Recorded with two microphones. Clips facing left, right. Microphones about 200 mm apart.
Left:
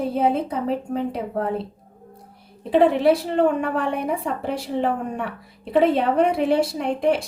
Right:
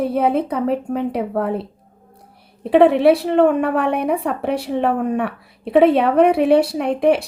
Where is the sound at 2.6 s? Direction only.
65° right (ahead or behind).